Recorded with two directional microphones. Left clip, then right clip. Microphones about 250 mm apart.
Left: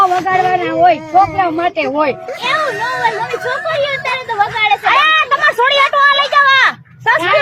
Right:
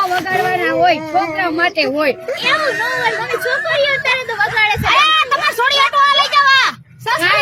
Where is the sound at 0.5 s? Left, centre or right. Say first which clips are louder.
Left 1 dB; right.